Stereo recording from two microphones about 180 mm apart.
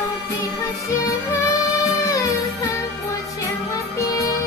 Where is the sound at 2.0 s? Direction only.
15° left (ahead or behind).